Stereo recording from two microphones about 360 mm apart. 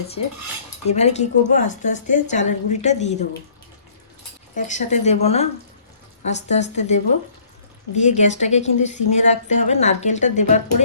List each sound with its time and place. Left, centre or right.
0.9 s a woman's voice: centre
4.5 s a woman's voice: centre